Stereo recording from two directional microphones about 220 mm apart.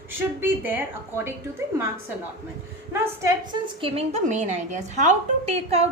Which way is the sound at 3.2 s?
20° right (ahead or behind).